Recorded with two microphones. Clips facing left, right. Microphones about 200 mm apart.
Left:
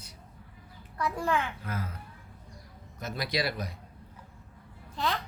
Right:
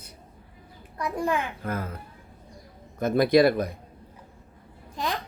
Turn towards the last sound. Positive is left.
turn(degrees=-15)  # may be behind; listen again after turning